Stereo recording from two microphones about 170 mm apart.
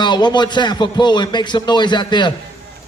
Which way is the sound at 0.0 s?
25° left (ahead or behind).